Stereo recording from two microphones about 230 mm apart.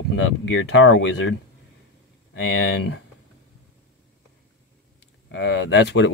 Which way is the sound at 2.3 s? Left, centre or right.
Left.